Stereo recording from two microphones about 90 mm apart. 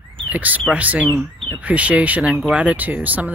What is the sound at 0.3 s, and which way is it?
Speech, 20° right (ahead or behind).